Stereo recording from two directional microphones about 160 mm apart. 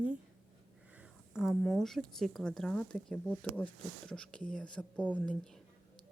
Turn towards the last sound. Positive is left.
turn(degrees=5)  # may be behind; listen again after turning